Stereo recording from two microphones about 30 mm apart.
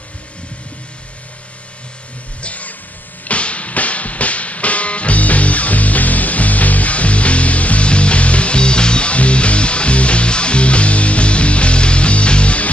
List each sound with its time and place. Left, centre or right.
2.4 s music: left
9.1 s music: left